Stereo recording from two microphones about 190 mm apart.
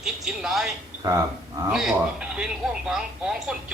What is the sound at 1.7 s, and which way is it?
Speech, 5° right (ahead or behind).